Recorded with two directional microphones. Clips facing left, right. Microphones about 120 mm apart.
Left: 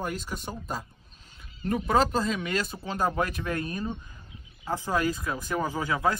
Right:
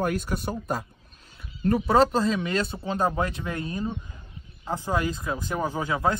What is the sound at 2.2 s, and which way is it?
Speech, 30° right (ahead or behind).